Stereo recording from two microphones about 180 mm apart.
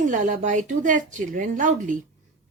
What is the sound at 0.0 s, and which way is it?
A woman's voice, 45° right (ahead or behind).